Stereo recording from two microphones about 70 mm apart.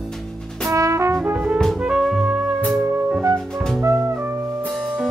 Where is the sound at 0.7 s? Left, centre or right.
Right.